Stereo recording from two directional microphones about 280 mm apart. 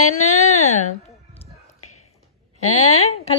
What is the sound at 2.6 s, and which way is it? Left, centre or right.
Speech, left.